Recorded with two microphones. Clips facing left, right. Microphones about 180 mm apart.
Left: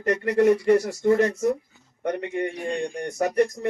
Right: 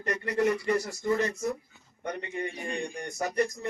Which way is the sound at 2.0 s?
70° left (ahead or behind).